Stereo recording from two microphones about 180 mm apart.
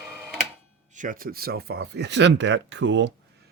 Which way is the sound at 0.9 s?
50° right (ahead or behind).